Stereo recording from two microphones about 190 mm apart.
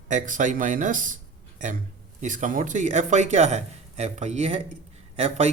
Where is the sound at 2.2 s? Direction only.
40° right (ahead or behind).